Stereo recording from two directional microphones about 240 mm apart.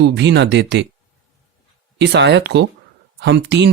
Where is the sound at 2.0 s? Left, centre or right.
Right.